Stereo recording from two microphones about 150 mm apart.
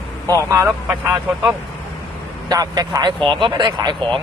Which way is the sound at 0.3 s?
20° right (ahead or behind).